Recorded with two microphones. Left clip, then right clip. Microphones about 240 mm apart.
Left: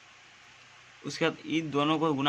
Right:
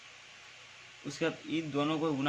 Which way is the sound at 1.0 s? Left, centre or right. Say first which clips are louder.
Left 5 dB; left.